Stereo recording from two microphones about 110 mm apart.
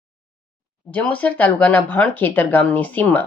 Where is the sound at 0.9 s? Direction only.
15° left (ahead or behind).